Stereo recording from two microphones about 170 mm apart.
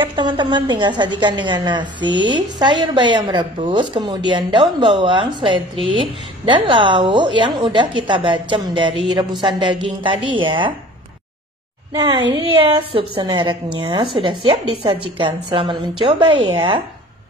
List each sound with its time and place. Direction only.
0.0 s speech: 30° right (ahead or behind)
11.9 s a woman's voice: 25° right (ahead or behind)